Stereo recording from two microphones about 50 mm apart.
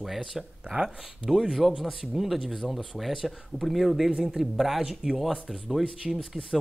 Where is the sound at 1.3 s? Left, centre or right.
Centre.